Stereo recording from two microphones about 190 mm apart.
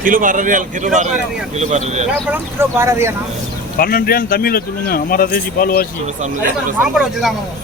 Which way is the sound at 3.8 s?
50° left (ahead or behind).